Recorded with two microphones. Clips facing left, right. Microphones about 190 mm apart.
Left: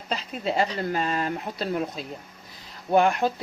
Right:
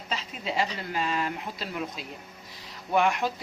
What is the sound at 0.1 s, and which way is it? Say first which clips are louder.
Speech: left 5 dB; 40° left (ahead or behind).